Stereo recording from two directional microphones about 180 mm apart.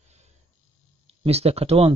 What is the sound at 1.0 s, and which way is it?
Speech, 35° right (ahead or behind).